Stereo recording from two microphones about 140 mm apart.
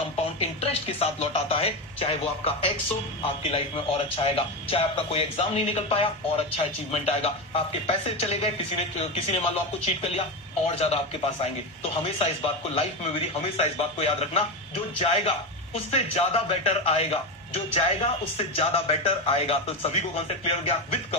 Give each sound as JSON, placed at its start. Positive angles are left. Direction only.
{"t": 0.3, "sound": "a man's voice", "side_deg": 45}